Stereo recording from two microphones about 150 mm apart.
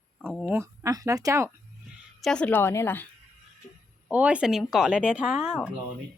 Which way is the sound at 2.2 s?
5° left (ahead or behind).